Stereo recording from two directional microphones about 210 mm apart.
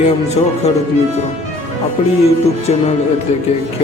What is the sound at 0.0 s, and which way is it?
Speech, 30° left (ahead or behind).